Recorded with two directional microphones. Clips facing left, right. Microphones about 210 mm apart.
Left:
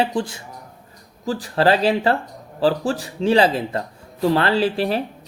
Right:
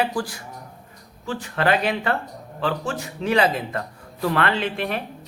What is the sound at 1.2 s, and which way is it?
Speech, 35° left (ahead or behind).